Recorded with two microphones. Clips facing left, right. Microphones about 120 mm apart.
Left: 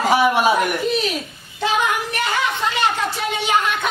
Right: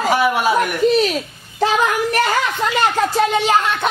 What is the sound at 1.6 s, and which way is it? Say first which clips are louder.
Speech: right 4 dB; 40° right (ahead or behind).